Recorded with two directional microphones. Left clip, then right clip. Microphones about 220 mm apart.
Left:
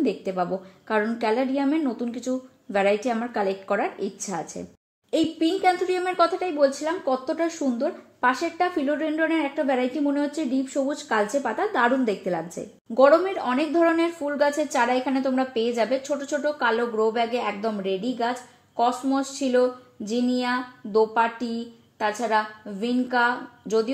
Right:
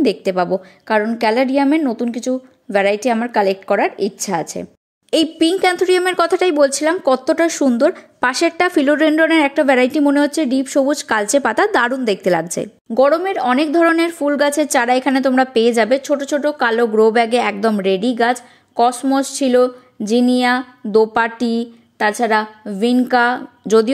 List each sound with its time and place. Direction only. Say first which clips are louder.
0.0 s a woman's voice: right 9 dB; 35° right (ahead or behind)